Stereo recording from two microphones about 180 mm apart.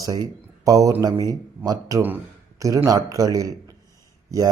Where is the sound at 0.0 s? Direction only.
20° right (ahead or behind).